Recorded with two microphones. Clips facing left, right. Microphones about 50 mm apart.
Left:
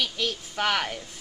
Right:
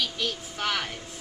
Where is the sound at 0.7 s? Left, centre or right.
Left.